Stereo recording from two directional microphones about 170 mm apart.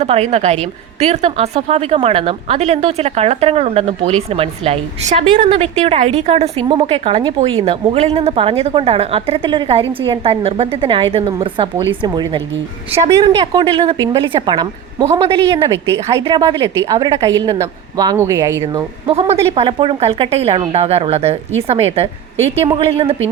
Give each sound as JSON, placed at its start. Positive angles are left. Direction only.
{"t": 0.0, "sound": "a woman's voice", "side_deg": -40}
{"t": 18.6, "sound": "a woman's voice", "side_deg": -30}